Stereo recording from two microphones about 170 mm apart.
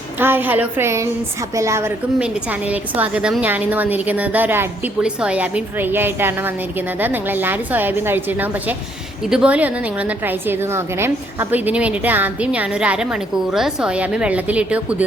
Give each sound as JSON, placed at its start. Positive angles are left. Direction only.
{"t": 0.2, "sound": "a woman's voice", "side_deg": -10}